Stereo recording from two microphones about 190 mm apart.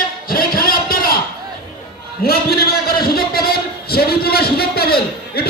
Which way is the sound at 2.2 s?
55° left (ahead or behind).